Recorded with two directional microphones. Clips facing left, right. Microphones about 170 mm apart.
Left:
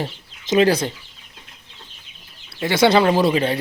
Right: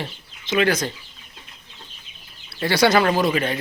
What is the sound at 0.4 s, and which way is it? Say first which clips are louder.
Speech: left 4 dB; 40° left (ahead or behind).